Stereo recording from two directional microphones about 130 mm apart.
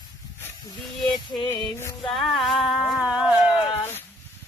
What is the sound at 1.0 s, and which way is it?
Music, 35° left (ahead or behind).